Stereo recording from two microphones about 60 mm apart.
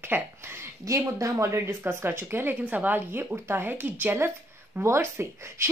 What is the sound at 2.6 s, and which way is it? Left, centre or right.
Speech, right.